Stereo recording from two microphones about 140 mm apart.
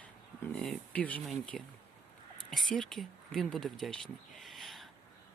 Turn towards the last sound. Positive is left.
turn(degrees=0)  # may be behind; listen again after turning